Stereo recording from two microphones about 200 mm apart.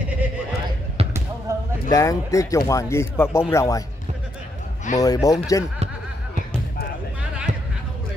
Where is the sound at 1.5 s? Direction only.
15° right (ahead or behind).